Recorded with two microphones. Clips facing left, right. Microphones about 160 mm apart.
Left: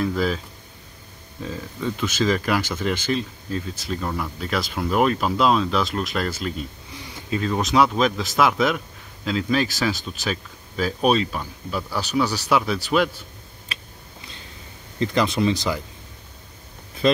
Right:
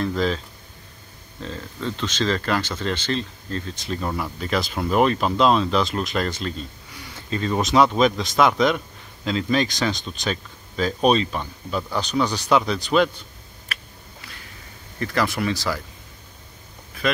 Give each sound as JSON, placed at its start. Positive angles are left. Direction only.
{"t": 0.0, "sound": "a sound", "side_deg": 5}
{"t": 1.4, "sound": "speech", "side_deg": 10}
{"t": 15.0, "sound": "speech", "side_deg": 20}